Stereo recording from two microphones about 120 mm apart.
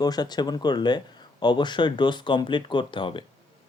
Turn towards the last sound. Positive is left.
turn(degrees=45)  # may be behind; listen again after turning